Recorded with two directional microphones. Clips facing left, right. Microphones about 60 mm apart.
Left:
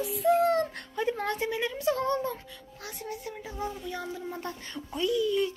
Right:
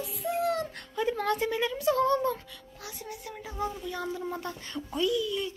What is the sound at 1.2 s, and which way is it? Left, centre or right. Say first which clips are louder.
Speech: right 2 dB; left.